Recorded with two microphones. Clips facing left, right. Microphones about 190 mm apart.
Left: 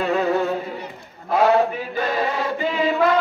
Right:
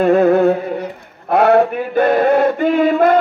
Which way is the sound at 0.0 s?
55° right (ahead or behind).